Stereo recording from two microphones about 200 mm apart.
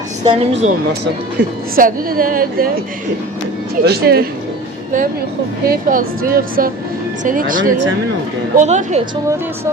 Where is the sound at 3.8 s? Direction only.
50° right (ahead or behind).